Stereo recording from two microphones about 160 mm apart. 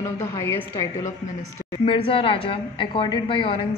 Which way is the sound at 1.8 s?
35° left (ahead or behind).